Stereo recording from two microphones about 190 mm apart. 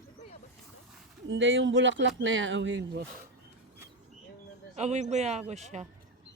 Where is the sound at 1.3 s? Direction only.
80° right.